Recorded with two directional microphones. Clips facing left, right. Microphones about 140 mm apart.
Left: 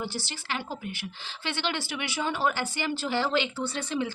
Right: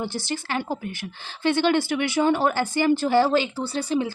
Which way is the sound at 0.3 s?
50° right (ahead or behind).